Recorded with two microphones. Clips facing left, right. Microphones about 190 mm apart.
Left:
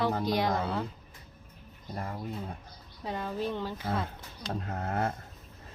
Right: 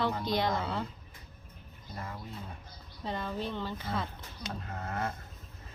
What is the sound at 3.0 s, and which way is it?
A woman's voice, 10° left (ahead or behind).